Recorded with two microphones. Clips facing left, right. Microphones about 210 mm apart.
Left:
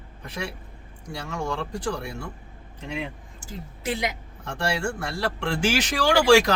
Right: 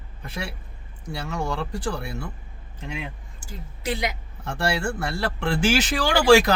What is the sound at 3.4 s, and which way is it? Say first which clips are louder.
Speech: right 1 dB; 20° left (ahead or behind).